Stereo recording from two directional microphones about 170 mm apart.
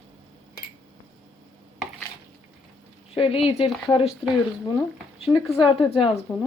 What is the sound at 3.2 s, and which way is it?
Speech, 35° left (ahead or behind).